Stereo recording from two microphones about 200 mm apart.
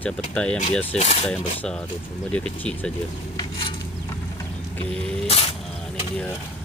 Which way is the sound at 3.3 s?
20° left (ahead or behind).